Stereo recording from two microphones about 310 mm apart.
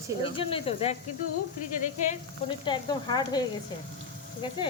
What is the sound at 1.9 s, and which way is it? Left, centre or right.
A woman's voice, left.